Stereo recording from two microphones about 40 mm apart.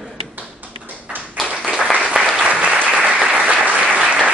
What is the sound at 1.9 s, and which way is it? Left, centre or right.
Applause, right.